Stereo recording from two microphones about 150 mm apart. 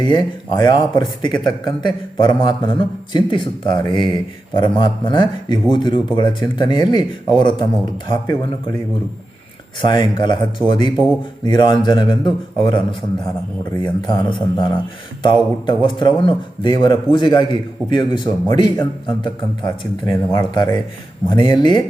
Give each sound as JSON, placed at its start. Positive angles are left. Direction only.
{"t": 0.0, "sound": "speech", "side_deg": 30}
{"t": 9.8, "sound": "speech", "side_deg": 30}